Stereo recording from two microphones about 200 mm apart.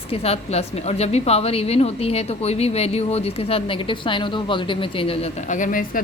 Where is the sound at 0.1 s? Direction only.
30° left (ahead or behind).